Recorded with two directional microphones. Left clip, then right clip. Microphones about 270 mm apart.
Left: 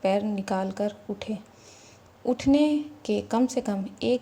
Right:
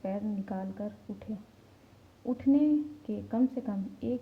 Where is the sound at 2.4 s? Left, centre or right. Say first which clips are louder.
Left 3 dB; centre.